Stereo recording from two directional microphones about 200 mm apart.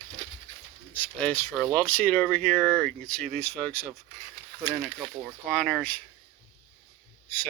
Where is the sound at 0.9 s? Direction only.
10° left (ahead or behind).